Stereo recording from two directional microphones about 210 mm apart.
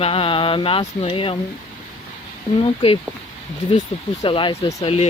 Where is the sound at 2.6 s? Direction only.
25° left (ahead or behind).